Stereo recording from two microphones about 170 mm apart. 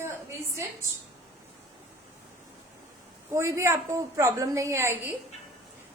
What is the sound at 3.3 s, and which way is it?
A woman's voice, 15° right (ahead or behind).